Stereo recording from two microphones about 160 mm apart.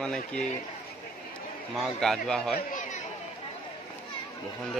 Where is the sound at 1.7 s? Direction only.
Centre (ahead or behind).